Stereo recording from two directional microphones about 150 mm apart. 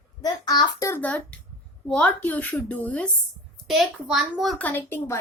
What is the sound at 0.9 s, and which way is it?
Speech, 10° left (ahead or behind).